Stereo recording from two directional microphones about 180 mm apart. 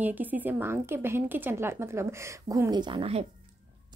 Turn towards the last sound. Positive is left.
turn(degrees=-30)  # may be behind; listen again after turning